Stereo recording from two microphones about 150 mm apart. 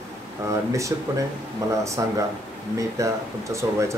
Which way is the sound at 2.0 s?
20° right (ahead or behind).